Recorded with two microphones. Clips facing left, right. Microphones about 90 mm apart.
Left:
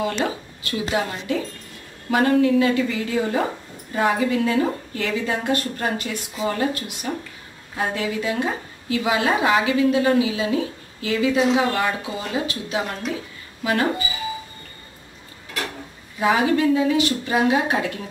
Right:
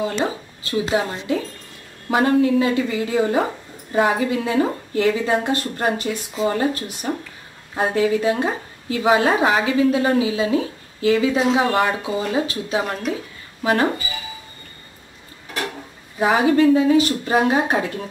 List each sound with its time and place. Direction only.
0.0 s speech: 30° right (ahead or behind)
16.5 s speech: 40° right (ahead or behind)